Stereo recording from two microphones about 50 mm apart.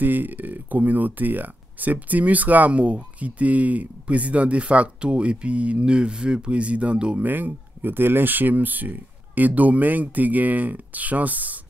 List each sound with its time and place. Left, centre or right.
0.0 s speech: right
7.2 s speech: right